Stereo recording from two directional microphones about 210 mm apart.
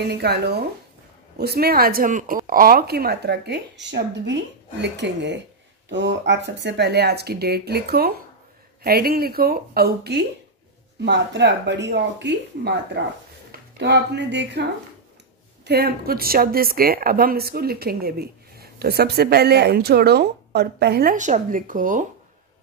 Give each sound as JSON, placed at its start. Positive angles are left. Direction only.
{"t": 0.0, "sound": "a woman's voice", "side_deg": -50}